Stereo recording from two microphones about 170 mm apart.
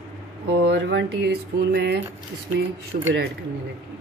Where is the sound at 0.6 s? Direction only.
90° right; by 2.0 s 70° right (ahead or behind).